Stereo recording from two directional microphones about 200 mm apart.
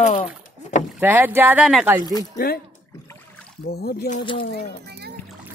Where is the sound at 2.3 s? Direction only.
50° left (ahead or behind).